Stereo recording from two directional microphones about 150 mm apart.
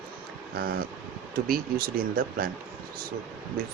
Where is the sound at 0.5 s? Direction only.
90° right.